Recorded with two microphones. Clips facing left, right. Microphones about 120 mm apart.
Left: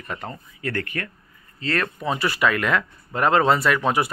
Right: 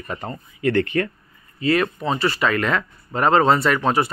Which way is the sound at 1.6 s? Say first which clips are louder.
Right 6 dB; 15° right (ahead or behind).